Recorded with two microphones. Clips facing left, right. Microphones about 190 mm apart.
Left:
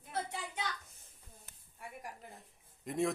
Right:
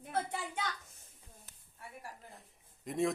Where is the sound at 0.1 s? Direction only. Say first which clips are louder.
Right 3 dB; 55° right (ahead or behind).